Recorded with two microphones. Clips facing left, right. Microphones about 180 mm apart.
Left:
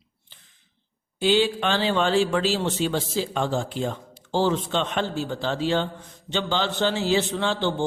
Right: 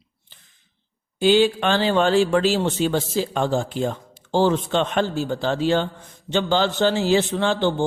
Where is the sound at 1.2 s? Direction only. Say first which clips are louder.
Right 4 dB; 50° right (ahead or behind).